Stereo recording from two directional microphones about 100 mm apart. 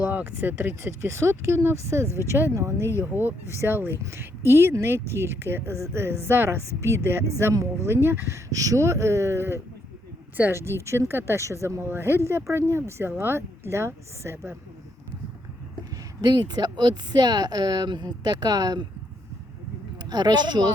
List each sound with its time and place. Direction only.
0.0 s speech: 15° right (ahead or behind)
16.2 s speech: 40° right (ahead or behind)
20.1 s speech: 45° right (ahead or behind)